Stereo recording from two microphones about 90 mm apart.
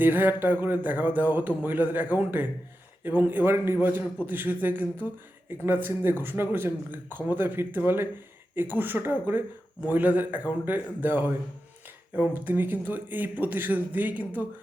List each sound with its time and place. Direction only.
0.0 s speech: 20° right (ahead or behind)